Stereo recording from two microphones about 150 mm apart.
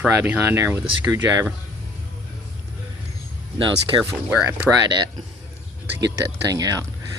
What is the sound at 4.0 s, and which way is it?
Speech, 5° right (ahead or behind).